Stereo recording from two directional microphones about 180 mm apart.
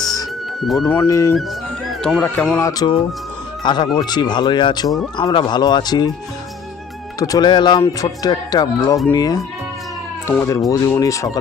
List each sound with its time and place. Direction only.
0.0 s music: 20° left (ahead or behind)
0.6 s speech: centre (ahead or behind)
0.9 s speech: 15° left (ahead or behind)
1.9 s speech: 5° left (ahead or behind); by 6.1 s 20° left (ahead or behind)
7.2 s speech: 20° left (ahead or behind)